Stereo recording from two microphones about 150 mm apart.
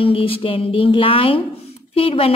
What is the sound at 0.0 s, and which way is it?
A woman's voice, 40° left (ahead or behind).